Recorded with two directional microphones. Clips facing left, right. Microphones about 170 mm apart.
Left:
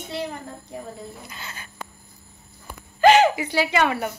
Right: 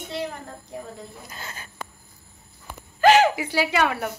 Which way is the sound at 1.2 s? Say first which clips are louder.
Even; 40° right (ahead or behind).